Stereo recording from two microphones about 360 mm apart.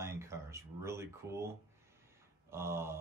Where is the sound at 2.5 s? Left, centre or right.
Centre.